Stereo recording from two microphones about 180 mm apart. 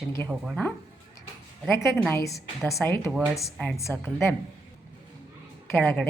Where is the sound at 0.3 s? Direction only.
5° right (ahead or behind).